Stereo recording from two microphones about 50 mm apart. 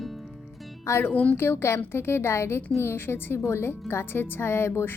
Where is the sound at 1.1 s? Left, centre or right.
Left.